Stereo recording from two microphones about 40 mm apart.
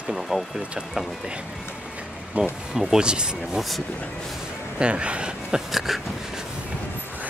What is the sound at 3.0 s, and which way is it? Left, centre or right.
Speech, right.